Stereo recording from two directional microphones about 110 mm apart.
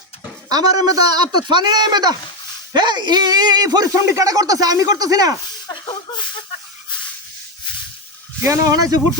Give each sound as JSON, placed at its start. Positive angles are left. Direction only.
{"t": 0.4, "sound": "speech", "side_deg": -35}
{"t": 5.9, "sound": "a sound", "side_deg": 45}
{"t": 8.4, "sound": "speech", "side_deg": -30}